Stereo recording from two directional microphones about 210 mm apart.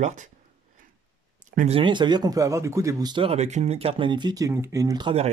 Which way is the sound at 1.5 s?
30° right (ahead or behind).